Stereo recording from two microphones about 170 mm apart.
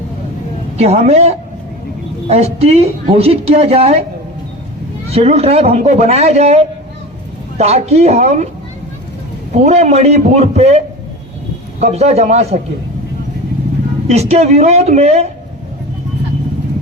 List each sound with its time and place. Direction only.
0.8 s a woman's voice: 40° right (ahead or behind)
5.1 s a woman's voice: 40° right (ahead or behind)
9.6 s a woman's voice: 40° right (ahead or behind)
14.1 s a woman's voice: 40° right (ahead or behind)